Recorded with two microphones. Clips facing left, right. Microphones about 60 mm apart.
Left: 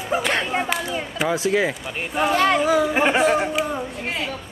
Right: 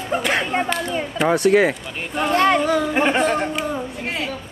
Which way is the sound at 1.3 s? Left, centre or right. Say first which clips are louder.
Right 6 dB; right.